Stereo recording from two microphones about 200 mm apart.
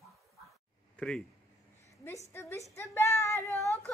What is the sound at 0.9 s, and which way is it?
A woman's voice, 5° left (ahead or behind).